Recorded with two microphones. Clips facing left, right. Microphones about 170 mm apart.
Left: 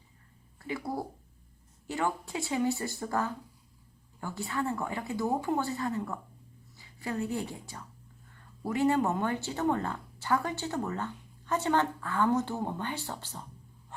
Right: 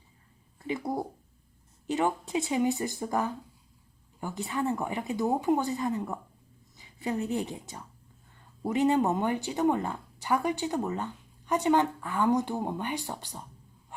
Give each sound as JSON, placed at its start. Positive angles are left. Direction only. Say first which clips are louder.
{"t": 0.7, "sound": "a woman's voice", "louder": "right 3 dB", "side_deg": -20}